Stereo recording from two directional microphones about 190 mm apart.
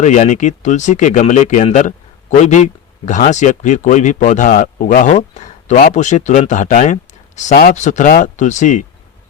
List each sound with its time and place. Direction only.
0.0 s speech: 40° left (ahead or behind)